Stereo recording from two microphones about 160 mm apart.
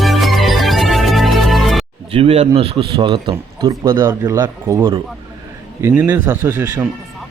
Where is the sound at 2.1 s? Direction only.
40° right (ahead or behind).